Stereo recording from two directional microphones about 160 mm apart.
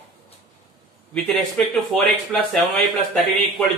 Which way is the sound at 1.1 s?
5° left (ahead or behind).